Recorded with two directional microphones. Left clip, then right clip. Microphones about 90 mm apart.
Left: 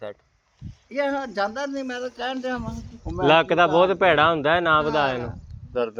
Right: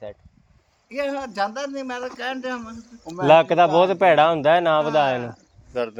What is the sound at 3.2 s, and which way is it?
A man's voice, 70° right (ahead or behind).